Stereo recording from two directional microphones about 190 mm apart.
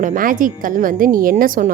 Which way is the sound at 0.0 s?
45° right (ahead or behind).